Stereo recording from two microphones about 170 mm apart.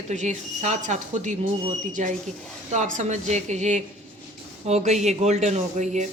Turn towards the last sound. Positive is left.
turn(degrees=-45)  # may be behind; listen again after turning